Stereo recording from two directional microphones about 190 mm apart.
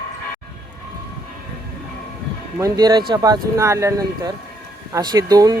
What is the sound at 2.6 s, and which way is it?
Speech, 20° right (ahead or behind).